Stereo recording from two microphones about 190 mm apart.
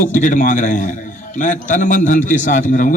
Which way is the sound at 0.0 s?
40° left (ahead or behind).